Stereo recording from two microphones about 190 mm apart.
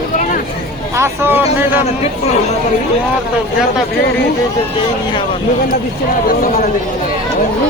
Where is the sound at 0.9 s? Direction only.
15° right (ahead or behind).